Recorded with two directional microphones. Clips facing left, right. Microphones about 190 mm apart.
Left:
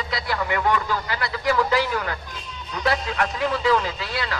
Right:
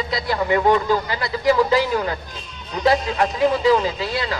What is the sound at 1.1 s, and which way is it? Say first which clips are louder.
A man's voice: right 5 dB; 20° right (ahead or behind).